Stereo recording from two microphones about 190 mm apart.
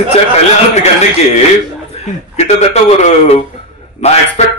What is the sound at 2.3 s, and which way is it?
A man's voice, 35° left (ahead or behind).